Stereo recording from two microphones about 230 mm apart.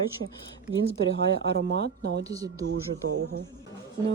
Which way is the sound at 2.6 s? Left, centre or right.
Right.